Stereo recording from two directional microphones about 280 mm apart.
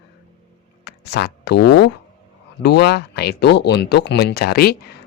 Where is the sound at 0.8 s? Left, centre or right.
Left.